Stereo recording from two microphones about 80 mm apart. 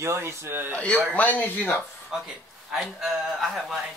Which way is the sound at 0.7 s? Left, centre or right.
Centre.